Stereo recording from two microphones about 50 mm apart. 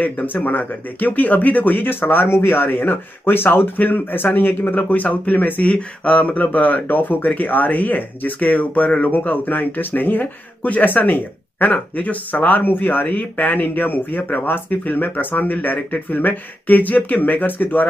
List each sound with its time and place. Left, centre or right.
0.0 s speech: left
5.7 s speech: left